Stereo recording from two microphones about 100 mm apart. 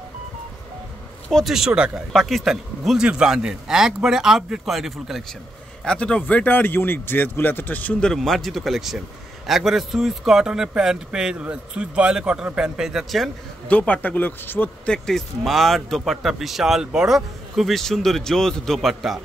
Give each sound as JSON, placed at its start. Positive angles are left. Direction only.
{"t": 1.3, "sound": "speech", "side_deg": -5}
{"t": 5.9, "sound": "speech", "side_deg": 10}
{"t": 13.7, "sound": "speech", "side_deg": 15}
{"t": 14.9, "sound": "speech", "side_deg": 5}